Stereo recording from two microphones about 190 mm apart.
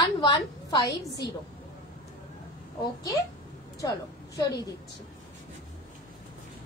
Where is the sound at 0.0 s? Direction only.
20° left (ahead or behind).